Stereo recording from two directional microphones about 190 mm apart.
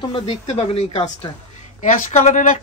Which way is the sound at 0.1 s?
35° left (ahead or behind).